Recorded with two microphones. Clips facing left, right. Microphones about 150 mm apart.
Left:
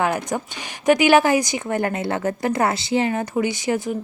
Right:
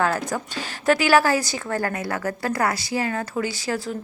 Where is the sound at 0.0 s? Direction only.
20° left (ahead or behind).